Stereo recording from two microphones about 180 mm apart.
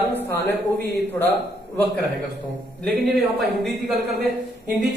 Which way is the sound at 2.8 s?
Centre (ahead or behind).